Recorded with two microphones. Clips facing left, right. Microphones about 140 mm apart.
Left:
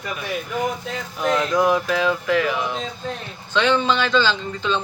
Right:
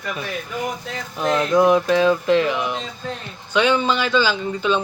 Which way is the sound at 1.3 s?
25° right (ahead or behind).